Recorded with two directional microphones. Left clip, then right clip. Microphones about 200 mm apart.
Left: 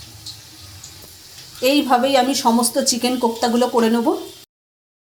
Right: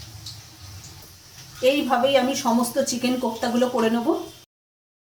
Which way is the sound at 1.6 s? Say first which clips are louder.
Left 4 dB; 40° left (ahead or behind).